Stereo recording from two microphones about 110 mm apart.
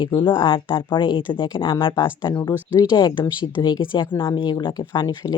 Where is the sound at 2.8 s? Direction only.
35° left (ahead or behind).